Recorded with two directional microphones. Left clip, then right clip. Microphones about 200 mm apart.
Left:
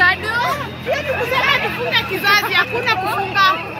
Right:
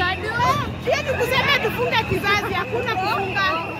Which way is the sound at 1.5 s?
55° right (ahead or behind).